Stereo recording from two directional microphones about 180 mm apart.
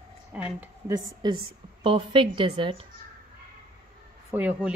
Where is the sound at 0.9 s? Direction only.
25° right (ahead or behind).